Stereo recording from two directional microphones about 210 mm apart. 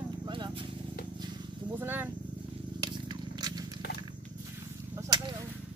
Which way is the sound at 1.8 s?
10° right (ahead or behind).